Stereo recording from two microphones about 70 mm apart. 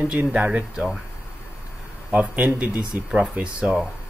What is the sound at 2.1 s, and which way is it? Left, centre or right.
Speech, right.